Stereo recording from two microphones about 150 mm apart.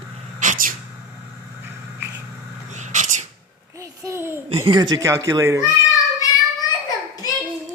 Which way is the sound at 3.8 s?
20° right (ahead or behind).